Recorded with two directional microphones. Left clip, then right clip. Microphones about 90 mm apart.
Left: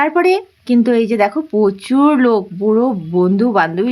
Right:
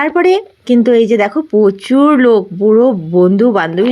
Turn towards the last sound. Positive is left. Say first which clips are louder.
# right 3 dB
turn(degrees=-25)  # may be behind; listen again after turning